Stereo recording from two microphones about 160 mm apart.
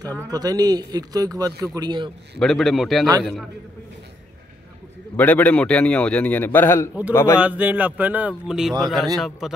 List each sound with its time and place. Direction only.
0.3 s a man's voice: 25° right (ahead or behind)
2.3 s a man's voice: centre (ahead or behind)
5.1 s a man's voice: 10° left (ahead or behind)
7.3 s a man's voice: 10° right (ahead or behind)